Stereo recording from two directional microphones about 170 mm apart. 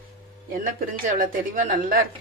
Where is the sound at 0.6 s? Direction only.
55° right (ahead or behind).